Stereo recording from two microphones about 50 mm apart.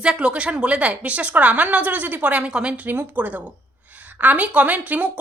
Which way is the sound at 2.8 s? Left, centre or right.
Right.